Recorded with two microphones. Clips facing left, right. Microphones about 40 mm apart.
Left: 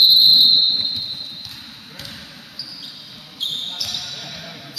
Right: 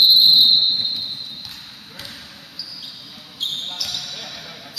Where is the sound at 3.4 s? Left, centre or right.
Centre.